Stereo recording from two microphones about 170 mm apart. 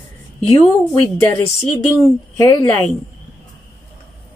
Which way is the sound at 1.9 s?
15° left (ahead or behind).